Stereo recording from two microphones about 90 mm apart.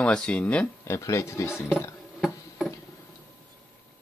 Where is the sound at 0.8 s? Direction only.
35° left (ahead or behind).